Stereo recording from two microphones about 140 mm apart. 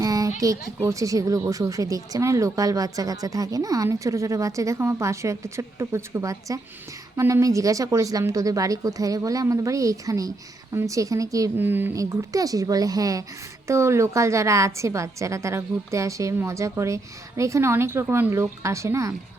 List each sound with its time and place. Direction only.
0.0 s speech: 25° right (ahead or behind)